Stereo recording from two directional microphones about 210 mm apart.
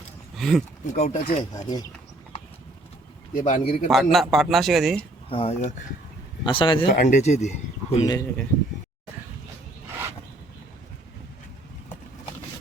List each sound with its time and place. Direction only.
0.3 s speech: centre (ahead or behind)
0.9 s speech: 30° left (ahead or behind)
3.3 s speech: 35° left (ahead or behind)
3.8 s a man's voice: centre (ahead or behind)
5.3 s speech: 30° left (ahead or behind)
6.9 s speech: 35° left (ahead or behind)
8.0 s speech: 20° left (ahead or behind)